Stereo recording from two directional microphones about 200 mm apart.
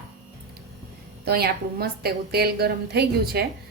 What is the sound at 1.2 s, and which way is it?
A woman's voice, 50° right (ahead or behind).